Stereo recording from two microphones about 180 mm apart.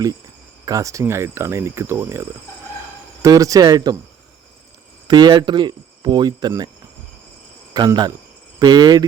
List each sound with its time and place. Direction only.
0.6 s speech: 20° right (ahead or behind)
3.2 s speech: 20° right (ahead or behind)
5.0 s speech: 25° right (ahead or behind)
7.7 s speech: 25° right (ahead or behind)